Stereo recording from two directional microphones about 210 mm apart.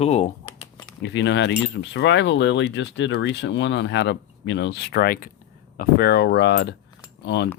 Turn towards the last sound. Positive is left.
turn(degrees=55)  # may be behind; listen again after turning